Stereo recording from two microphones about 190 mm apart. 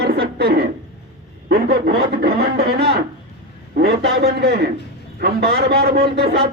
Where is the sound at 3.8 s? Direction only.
55° right (ahead or behind).